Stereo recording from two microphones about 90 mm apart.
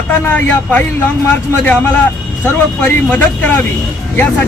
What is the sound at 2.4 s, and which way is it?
Speech, 15° left (ahead or behind).